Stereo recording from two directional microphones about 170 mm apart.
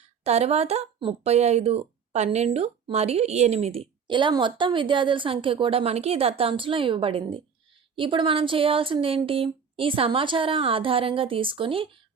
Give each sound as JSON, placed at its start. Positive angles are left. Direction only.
{"t": 0.3, "sound": "speech", "side_deg": -40}